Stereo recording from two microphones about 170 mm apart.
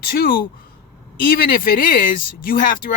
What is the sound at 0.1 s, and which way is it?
Speech, 60° left (ahead or behind).